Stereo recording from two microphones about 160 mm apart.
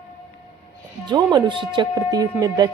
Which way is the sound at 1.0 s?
25° right (ahead or behind).